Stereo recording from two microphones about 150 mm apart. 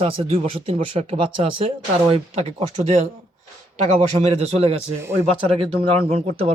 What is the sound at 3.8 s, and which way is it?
Speech, 45° right (ahead or behind).